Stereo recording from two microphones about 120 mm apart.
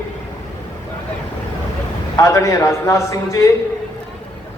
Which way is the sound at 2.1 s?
25° left (ahead or behind).